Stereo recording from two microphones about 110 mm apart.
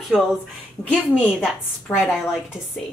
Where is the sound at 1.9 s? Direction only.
15° left (ahead or behind).